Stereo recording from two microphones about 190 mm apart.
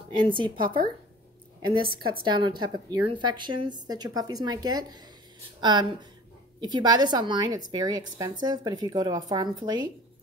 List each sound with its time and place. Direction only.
0.2 s a woman's voice: 25° right (ahead or behind)
0.6 s speech: 50° right (ahead or behind)
1.7 s a woman's voice: 25° right (ahead or behind)